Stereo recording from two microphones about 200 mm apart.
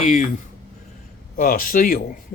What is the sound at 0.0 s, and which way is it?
Speech, 35° left (ahead or behind).